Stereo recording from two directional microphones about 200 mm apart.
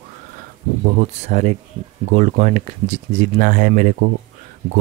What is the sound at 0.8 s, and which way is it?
Speech, 35° right (ahead or behind).